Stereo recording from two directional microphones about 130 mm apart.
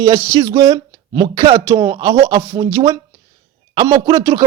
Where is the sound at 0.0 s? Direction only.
25° right (ahead or behind).